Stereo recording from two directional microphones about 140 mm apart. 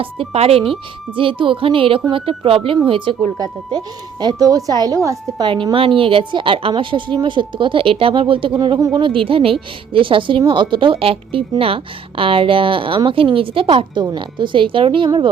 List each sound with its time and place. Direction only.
0.0 s speech: 45° right (ahead or behind)